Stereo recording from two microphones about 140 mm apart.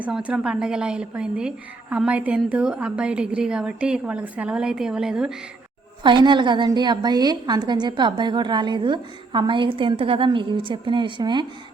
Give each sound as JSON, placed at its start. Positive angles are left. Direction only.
{"t": 0.0, "sound": "a woman's voice", "side_deg": -10}
{"t": 6.0, "sound": "a woman's voice", "side_deg": -35}